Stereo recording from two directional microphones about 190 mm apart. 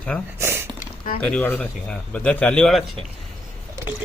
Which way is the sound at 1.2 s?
5° left (ahead or behind).